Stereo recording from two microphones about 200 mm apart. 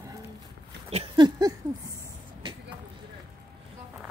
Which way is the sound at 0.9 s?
25° right (ahead or behind).